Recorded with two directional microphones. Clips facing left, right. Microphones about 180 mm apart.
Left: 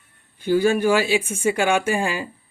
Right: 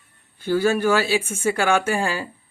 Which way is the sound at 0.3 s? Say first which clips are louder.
Left 2 dB; 15° left (ahead or behind).